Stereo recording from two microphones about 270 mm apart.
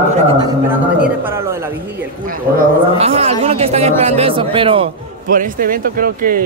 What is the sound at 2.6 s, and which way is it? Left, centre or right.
A man's voice, right.